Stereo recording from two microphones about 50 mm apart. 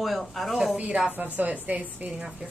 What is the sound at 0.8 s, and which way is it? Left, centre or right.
Speech, right.